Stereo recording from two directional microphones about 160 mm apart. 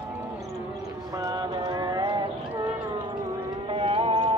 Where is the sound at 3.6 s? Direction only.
35° right (ahead or behind).